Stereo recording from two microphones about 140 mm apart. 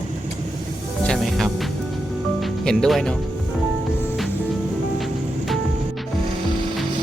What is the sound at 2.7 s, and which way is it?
Speech, 5° left (ahead or behind).